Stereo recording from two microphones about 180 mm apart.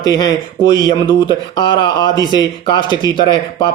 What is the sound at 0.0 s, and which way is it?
Speech, 20° left (ahead or behind).